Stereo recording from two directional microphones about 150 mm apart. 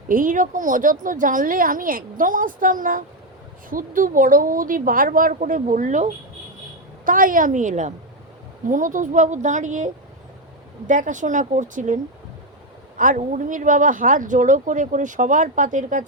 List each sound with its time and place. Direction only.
0.1 s speech: 65° right (ahead or behind)
7.0 s speech: 65° right (ahead or behind)
13.0 s speech: 60° right (ahead or behind)